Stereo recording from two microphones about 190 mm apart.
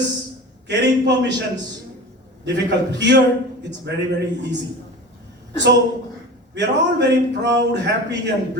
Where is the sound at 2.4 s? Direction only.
65° right (ahead or behind).